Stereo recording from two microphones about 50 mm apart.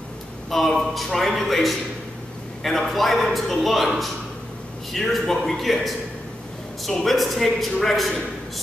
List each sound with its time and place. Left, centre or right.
0.5 s a man's voice: centre
4.9 s a man's voice: centre